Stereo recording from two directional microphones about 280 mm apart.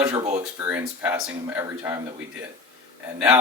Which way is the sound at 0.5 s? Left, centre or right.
Centre.